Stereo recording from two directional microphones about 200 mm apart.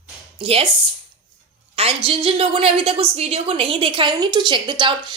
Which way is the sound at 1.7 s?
30° right (ahead or behind).